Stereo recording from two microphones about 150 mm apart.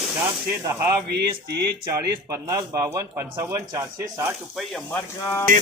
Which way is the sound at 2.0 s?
20° right (ahead or behind).